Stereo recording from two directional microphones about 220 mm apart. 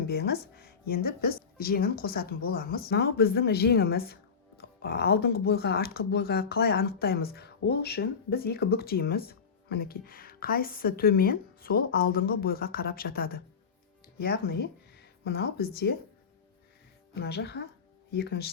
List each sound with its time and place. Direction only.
0.1 s speech: 50° left (ahead or behind)
17.2 s speech: 50° left (ahead or behind)